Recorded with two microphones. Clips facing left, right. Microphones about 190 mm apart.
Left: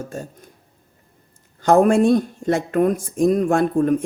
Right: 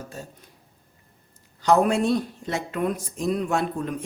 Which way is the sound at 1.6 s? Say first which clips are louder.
Left 6 dB; 50° left (ahead or behind).